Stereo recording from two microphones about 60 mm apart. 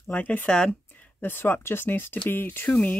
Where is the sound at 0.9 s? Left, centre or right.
Left.